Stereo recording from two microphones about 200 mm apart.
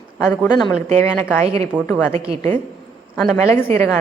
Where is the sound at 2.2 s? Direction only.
30° right (ahead or behind).